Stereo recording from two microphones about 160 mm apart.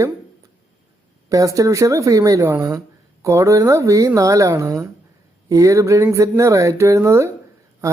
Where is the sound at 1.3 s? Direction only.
20° right (ahead or behind).